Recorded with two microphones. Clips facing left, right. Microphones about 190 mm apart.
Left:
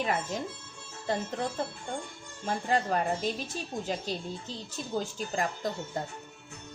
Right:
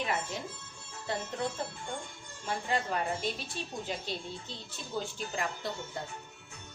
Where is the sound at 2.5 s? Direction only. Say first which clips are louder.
Left 4 dB; 40° left (ahead or behind).